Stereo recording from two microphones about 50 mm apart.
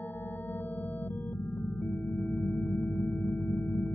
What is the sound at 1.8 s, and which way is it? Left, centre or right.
Music, centre.